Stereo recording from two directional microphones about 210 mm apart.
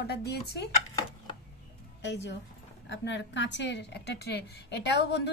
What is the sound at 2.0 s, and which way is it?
A woman's voice, 55° left (ahead or behind).